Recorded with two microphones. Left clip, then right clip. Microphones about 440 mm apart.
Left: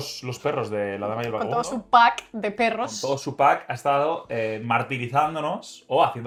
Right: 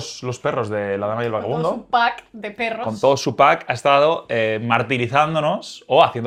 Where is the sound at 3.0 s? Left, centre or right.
Right.